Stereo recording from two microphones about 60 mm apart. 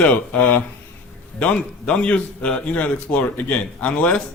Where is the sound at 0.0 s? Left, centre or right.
Left.